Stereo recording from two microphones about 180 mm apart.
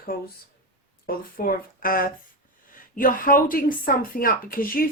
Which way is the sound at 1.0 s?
55° left (ahead or behind).